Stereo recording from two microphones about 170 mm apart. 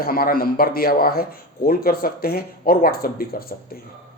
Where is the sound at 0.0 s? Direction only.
60° left (ahead or behind).